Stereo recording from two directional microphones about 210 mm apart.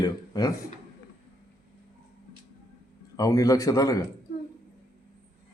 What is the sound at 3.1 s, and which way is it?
Speech, 15° left (ahead or behind).